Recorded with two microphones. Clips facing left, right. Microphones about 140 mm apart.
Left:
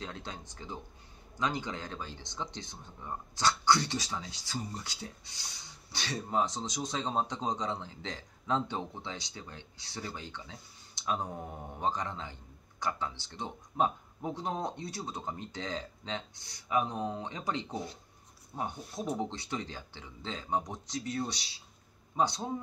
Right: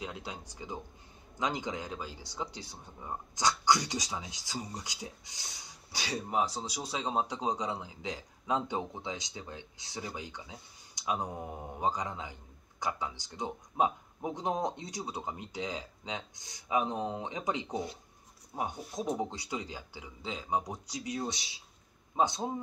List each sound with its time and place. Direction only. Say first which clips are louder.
0.0 s a man's voice: right 1 dB; 10° right (ahead or behind)